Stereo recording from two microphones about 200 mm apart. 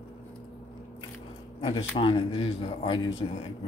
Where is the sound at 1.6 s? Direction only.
20° left (ahead or behind).